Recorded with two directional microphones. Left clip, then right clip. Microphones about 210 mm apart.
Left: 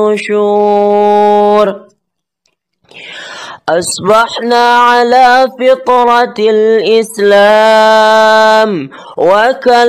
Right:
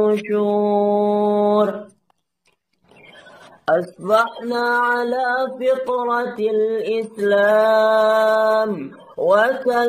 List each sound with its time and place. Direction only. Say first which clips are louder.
0.0 s mantra: left 8 dB; 50° left (ahead or behind)
3.6 s speech: left 8 dB; 55° left (ahead or behind)